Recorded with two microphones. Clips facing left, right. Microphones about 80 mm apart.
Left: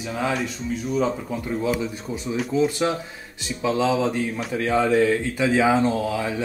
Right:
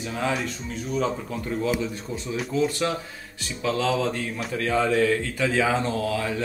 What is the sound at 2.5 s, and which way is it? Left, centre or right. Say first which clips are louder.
Speech: left 3 dB; centre.